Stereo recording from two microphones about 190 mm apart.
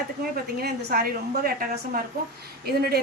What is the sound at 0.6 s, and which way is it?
Speech, 55° right (ahead or behind).